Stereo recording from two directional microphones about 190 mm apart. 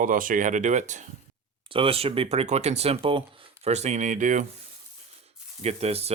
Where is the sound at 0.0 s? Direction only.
45° right (ahead or behind).